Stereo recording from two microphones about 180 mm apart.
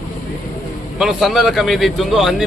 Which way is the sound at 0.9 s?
Centre (ahead or behind).